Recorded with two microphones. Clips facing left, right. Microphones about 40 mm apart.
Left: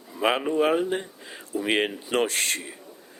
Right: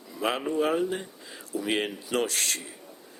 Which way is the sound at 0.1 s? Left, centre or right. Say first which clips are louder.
Left 5 dB; left.